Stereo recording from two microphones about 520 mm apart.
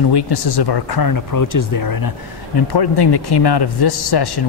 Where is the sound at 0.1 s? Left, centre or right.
Left.